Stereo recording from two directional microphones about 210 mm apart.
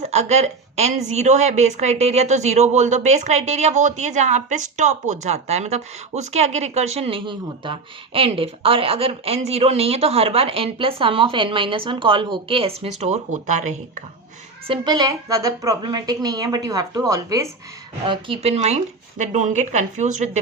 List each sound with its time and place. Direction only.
0.0 s a woman's voice: 30° right (ahead or behind)
14.7 s a woman's voice: 20° right (ahead or behind)